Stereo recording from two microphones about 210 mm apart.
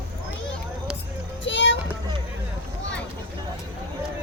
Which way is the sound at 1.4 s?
60° left (ahead or behind).